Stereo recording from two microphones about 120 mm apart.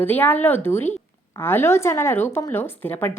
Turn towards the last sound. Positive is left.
turn(degrees=15)  # may be behind; listen again after turning